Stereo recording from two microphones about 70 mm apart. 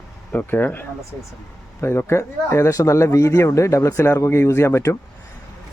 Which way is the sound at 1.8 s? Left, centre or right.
Left.